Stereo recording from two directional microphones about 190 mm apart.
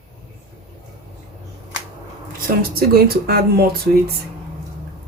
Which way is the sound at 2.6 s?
50° right (ahead or behind).